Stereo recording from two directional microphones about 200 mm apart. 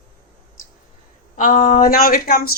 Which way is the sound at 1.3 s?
40° left (ahead or behind).